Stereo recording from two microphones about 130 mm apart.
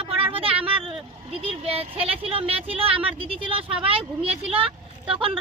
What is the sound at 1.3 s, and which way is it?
Speech, 45° right (ahead or behind).